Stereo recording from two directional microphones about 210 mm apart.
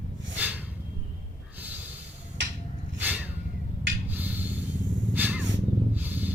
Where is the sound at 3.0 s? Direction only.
5° right (ahead or behind).